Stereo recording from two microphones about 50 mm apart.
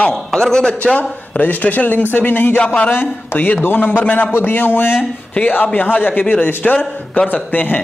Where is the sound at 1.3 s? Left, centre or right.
Left.